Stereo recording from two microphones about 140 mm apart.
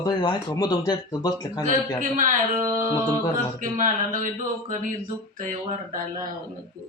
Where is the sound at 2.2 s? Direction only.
65° right (ahead or behind).